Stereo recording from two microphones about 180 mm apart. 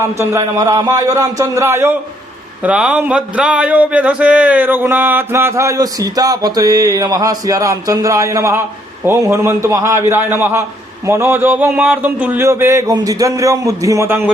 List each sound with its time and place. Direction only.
0.0 s speech: 15° right (ahead or behind)